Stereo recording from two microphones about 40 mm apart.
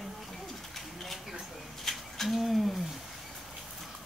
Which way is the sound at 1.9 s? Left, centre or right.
Centre.